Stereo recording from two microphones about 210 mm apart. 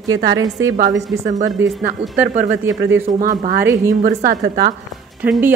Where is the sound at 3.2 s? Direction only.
40° right (ahead or behind).